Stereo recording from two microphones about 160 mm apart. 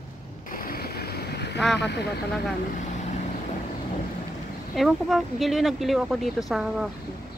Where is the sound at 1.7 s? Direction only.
90° left.